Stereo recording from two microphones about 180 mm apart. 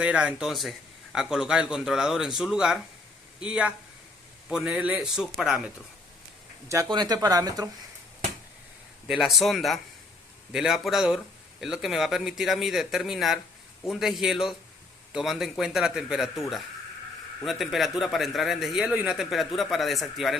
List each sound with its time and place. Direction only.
0.0 s a man's voice: 5° right (ahead or behind)
6.7 s speech: 20° right (ahead or behind)
9.0 s a man's voice: centre (ahead or behind)
17.4 s a man's voice: centre (ahead or behind)